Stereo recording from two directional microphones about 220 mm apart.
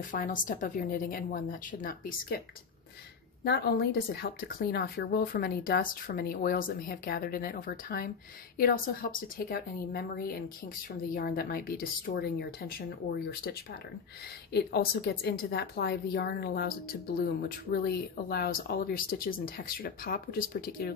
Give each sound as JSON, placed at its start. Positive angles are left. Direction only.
{"t": 0.1, "sound": "speech", "side_deg": 35}
{"t": 3.4, "sound": "speech", "side_deg": 45}